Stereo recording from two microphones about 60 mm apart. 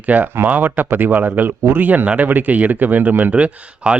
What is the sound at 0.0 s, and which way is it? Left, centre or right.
Speech, right.